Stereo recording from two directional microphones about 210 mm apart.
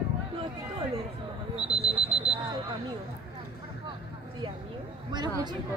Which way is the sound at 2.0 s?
5° right (ahead or behind).